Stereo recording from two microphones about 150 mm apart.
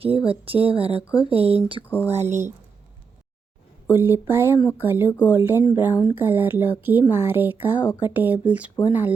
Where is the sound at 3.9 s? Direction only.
15° right (ahead or behind).